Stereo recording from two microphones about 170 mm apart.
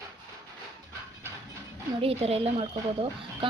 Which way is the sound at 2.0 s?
35° right (ahead or behind).